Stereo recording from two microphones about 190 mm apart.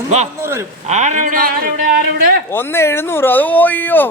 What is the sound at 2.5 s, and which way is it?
Speech, 15° left (ahead or behind).